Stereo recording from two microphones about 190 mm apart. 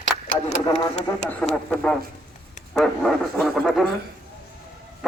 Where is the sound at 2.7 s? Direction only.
Centre (ahead or behind).